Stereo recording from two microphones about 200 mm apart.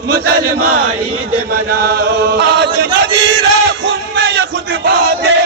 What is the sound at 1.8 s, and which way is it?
Chant, 55° right (ahead or behind).